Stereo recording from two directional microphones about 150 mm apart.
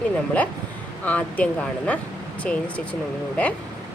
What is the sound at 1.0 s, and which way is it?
Speech, 10° left (ahead or behind).